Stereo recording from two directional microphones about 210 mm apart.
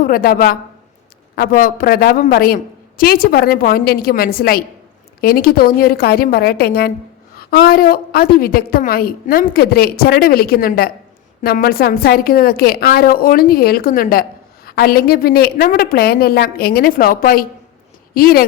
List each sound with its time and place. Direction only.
0.0 s a woman's voice: 45° left (ahead or behind)